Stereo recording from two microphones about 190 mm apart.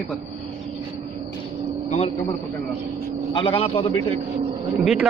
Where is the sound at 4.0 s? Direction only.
35° right (ahead or behind).